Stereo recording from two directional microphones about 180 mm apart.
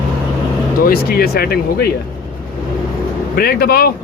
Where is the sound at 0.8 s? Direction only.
55° left (ahead or behind).